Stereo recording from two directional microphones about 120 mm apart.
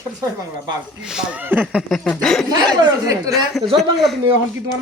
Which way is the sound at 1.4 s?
15° right (ahead or behind).